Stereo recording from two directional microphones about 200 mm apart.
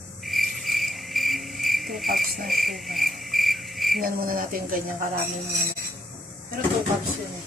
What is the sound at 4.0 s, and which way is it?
Frog, 45° right (ahead or behind).